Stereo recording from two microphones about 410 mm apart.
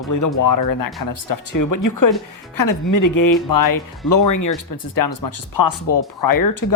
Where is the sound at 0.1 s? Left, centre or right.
Left.